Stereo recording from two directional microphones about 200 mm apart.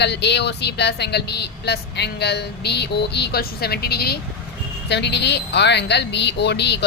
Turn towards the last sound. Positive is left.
turn(degrees=60)  # may be behind; listen again after turning